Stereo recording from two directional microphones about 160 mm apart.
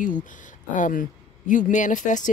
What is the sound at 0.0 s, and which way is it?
Speech, 55° left (ahead or behind).